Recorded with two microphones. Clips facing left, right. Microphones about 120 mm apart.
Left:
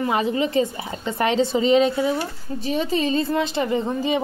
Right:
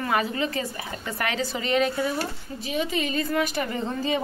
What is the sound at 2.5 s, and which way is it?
Speech, 35° left (ahead or behind).